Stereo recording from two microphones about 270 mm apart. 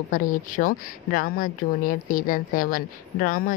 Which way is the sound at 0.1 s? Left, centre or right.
Left.